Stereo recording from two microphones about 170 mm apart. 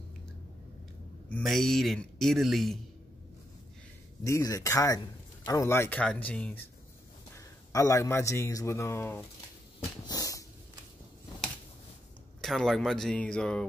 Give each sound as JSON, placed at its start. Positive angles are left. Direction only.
{"t": 1.3, "sound": "speech", "side_deg": 0}
{"t": 4.2, "sound": "a man's voice", "side_deg": 20}
{"t": 10.0, "sound": "a sound", "side_deg": 20}
{"t": 12.4, "sound": "speech", "side_deg": 0}